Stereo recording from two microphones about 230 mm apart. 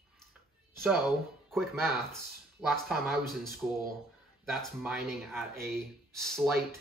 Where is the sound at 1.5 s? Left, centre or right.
Centre.